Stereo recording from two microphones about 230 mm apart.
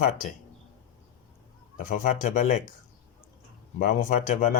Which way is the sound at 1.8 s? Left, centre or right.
Left.